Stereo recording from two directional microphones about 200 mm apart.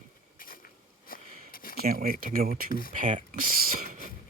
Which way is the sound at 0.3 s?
45° left (ahead or behind).